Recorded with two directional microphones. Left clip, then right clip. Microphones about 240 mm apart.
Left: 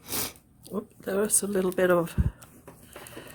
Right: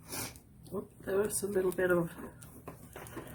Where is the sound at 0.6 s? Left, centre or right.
Left.